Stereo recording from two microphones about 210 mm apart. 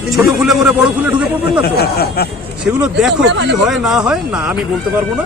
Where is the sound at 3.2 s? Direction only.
55° right (ahead or behind).